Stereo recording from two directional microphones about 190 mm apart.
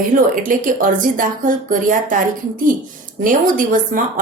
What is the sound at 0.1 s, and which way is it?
Speech, 45° right (ahead or behind).